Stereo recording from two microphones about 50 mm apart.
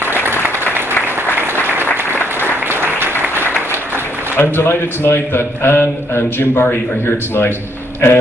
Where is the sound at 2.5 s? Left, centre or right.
Right.